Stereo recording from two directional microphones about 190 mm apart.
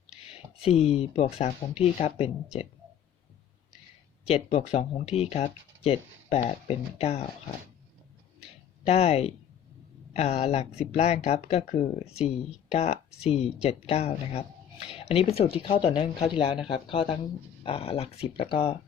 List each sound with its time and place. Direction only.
0.6 s speech: 30° left (ahead or behind)
4.3 s speech: 30° left (ahead or behind)
8.9 s speech: 35° left (ahead or behind)